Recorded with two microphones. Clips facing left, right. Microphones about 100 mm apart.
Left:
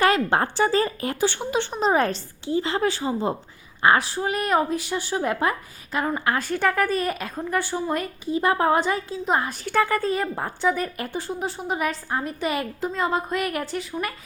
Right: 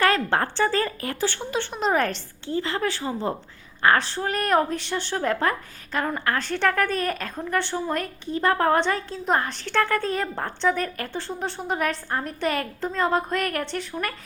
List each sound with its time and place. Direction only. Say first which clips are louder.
0.0 s a woman's voice: left 2 dB; 15° left (ahead or behind)